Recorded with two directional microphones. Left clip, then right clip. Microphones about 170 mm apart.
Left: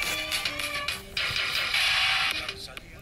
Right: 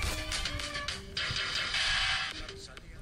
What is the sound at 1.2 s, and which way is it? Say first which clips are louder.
Music: left 5 dB; 25° left (ahead or behind).